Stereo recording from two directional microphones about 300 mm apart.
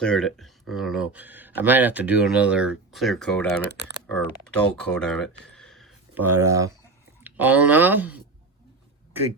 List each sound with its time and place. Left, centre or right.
0.0 s speech: centre
3.7 s speech: left
4.0 s speech: centre